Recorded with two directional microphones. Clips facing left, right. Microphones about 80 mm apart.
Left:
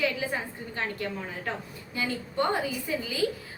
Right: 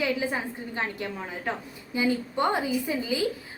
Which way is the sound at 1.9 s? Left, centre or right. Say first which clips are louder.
Right 4 dB; centre.